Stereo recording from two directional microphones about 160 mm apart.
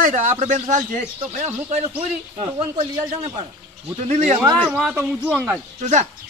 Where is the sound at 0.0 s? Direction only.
50° right (ahead or behind).